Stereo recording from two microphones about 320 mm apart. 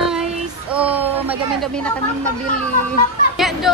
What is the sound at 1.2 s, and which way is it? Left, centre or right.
A woman's voice, centre.